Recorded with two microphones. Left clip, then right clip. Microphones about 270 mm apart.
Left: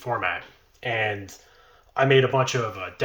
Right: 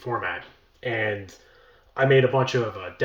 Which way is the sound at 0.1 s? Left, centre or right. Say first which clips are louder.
Left 2 dB; centre.